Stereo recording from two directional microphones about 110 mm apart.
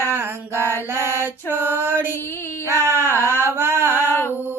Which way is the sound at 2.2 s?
20° left (ahead or behind).